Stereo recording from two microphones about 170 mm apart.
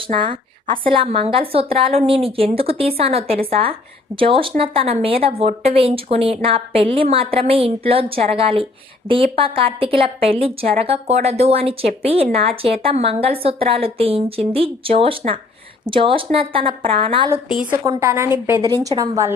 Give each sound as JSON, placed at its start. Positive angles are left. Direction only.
{"t": 0.0, "sound": "speech", "side_deg": -30}
{"t": 17.7, "sound": "a woman's voice", "side_deg": -20}